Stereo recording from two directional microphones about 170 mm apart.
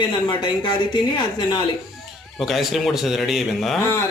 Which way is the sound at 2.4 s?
Centre (ahead or behind).